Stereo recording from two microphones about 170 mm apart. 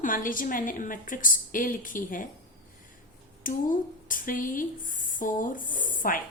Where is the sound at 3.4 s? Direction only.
55° left (ahead or behind).